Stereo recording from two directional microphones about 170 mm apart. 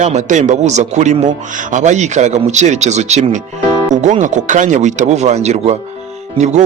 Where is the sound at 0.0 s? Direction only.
45° right (ahead or behind).